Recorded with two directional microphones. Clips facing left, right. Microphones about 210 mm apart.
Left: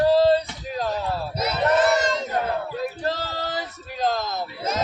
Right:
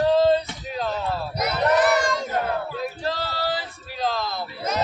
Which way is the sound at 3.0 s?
45° left (ahead or behind).